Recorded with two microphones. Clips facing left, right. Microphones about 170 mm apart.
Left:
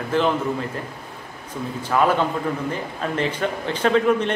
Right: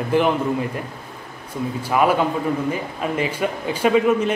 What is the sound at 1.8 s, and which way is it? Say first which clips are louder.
A man's voice: right 1 dB; 10° right (ahead or behind).